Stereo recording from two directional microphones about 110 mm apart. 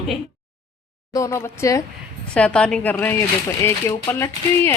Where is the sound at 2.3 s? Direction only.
10° left (ahead or behind).